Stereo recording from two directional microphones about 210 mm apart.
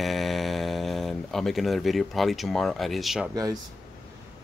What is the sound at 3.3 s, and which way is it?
Speech, 15° right (ahead or behind).